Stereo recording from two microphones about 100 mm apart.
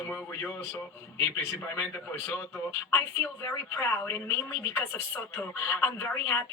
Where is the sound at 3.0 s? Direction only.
25° left (ahead or behind).